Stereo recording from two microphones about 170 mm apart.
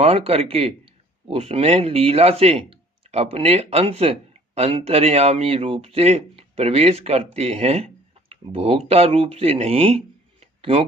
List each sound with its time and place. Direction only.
0.0 s speech: 35° right (ahead or behind)